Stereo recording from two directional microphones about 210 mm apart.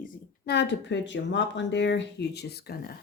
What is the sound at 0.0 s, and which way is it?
Speech, 50° left (ahead or behind).